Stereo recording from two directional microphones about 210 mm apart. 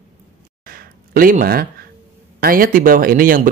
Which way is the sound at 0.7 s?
45° right (ahead or behind).